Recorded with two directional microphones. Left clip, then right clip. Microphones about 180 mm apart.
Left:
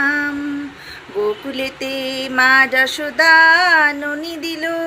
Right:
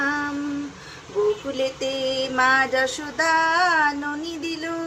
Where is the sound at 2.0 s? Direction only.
15° left (ahead or behind).